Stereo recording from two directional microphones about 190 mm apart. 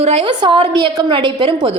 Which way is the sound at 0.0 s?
30° right (ahead or behind).